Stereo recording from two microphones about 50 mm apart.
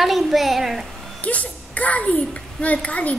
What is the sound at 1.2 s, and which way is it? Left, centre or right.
A child's voice, left.